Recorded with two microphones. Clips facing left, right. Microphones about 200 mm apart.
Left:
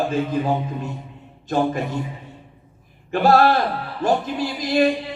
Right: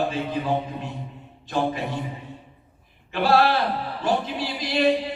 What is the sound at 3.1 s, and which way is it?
Speech, 45° left (ahead or behind).